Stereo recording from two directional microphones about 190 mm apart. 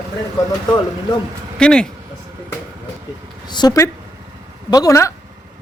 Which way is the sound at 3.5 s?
20° left (ahead or behind).